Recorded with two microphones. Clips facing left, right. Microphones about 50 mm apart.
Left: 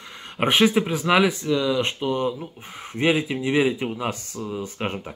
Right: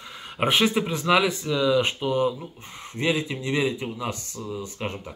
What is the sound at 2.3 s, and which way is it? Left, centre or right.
Speech, centre.